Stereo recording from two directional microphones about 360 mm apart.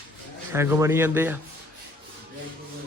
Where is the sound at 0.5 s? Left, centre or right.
Centre.